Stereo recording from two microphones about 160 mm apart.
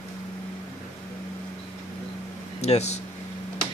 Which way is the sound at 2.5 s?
40° left (ahead or behind).